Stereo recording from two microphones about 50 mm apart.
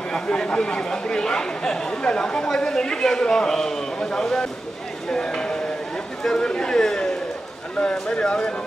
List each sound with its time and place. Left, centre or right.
0.1 s speech: centre